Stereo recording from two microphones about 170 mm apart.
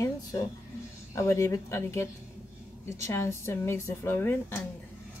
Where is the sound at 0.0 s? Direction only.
15° left (ahead or behind).